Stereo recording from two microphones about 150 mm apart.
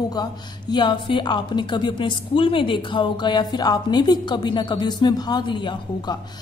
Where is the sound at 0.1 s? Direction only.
30° left (ahead or behind).